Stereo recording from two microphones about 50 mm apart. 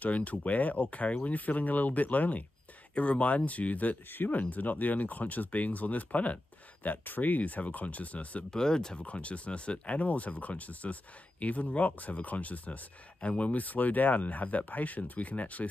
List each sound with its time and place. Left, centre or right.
0.0 s speech: left
8.5 s speech: centre
9.0 s speech: left